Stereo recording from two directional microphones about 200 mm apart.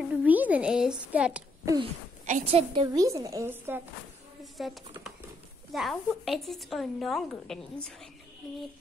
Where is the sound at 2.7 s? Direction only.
20° right (ahead or behind).